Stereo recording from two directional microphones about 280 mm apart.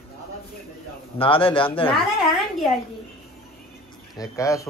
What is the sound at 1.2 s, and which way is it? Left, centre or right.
Speech, centre.